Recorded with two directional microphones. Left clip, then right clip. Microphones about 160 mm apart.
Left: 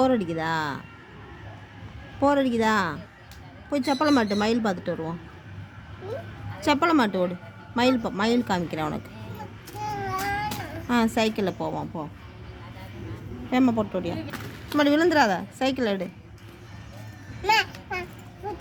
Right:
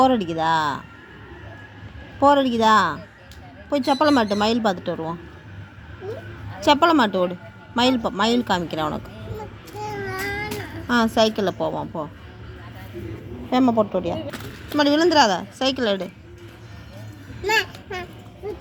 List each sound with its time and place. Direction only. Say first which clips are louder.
0.0 s speech: right 5 dB; centre (ahead or behind)
2.2 s speech: right 6 dB; centre (ahead or behind)
6.6 s speech: right 5 dB; centre (ahead or behind)
9.8 s child singing: even; 40° left (ahead or behind)
10.8 s speech: right 5 dB; 5° left (ahead or behind)
13.5 s speech: right 5 dB; 5° left (ahead or behind)
14.8 s a woman's voice: right 4 dB; 15° left (ahead or behind)